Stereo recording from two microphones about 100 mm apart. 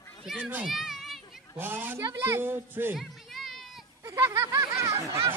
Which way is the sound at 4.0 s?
30° right (ahead or behind).